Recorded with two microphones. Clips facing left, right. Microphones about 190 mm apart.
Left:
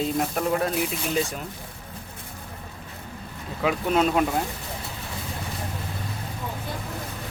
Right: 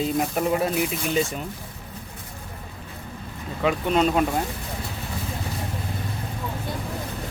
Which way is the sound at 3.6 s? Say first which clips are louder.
Right 1 dB; 5° left (ahead or behind).